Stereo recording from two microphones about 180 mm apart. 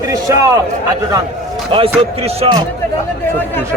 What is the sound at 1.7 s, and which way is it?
Speech, 30° right (ahead or behind).